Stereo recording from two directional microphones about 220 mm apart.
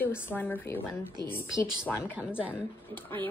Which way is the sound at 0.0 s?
10° left (ahead or behind).